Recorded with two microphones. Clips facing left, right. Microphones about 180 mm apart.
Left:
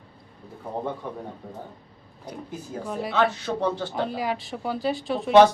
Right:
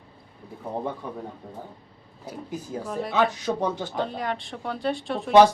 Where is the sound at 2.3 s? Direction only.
5° right (ahead or behind).